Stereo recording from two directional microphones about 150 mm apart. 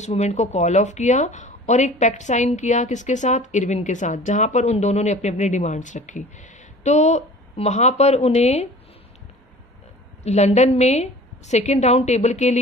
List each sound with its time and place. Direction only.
0.0 s speech: 50° left (ahead or behind)
10.2 s speech: 50° left (ahead or behind)